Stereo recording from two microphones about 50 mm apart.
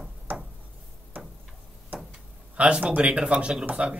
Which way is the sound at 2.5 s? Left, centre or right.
Right.